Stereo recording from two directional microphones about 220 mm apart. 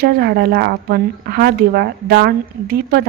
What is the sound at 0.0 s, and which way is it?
A woman's voice, 45° right (ahead or behind).